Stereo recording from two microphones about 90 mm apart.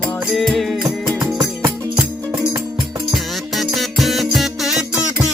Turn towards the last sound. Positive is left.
turn(degrees=-5)  # may be behind; listen again after turning